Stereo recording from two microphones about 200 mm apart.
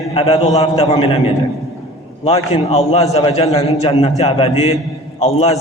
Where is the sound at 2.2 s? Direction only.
30° left (ahead or behind).